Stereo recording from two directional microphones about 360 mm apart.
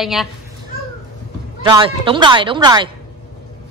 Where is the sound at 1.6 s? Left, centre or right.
Centre.